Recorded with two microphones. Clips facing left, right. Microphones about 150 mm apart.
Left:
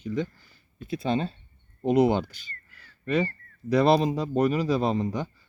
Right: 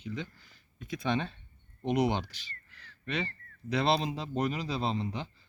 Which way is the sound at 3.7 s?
45° left (ahead or behind).